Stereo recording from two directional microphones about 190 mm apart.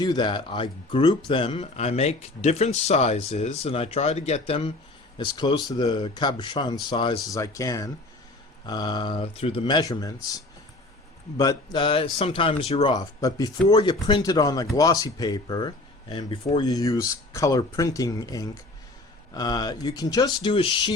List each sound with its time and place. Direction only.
0.0 s speech: 20° left (ahead or behind)
11.3 s speech: 20° left (ahead or behind)